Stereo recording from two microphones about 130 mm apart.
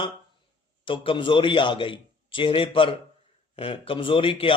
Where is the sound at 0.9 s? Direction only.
40° left (ahead or behind).